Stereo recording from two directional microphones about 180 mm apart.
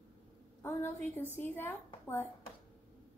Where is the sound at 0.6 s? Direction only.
10° left (ahead or behind).